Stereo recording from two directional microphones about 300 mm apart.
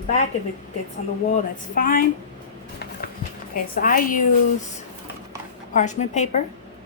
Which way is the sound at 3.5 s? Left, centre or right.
Left.